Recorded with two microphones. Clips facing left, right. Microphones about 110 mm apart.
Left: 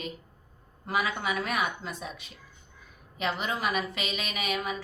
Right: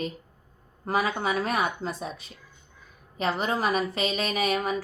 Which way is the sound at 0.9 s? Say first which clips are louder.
Right 4 dB; 35° right (ahead or behind).